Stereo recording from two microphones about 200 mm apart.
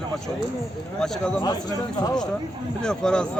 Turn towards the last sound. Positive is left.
turn(degrees=5)  # may be behind; listen again after turning